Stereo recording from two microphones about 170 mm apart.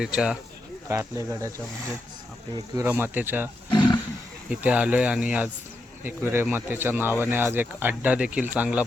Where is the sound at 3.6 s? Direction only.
30° left (ahead or behind).